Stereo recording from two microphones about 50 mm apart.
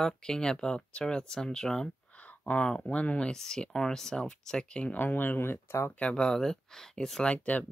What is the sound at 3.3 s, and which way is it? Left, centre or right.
Speech, centre.